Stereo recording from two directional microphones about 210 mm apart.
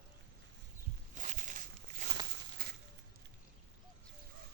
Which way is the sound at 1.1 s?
35° right (ahead or behind).